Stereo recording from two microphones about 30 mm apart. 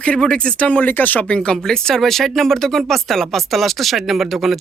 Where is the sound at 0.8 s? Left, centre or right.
Left.